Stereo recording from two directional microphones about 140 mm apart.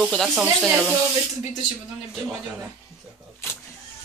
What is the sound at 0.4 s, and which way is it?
Speech, 10° right (ahead or behind).